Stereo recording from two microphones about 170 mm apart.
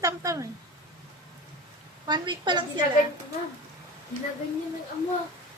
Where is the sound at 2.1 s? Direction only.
25° right (ahead or behind).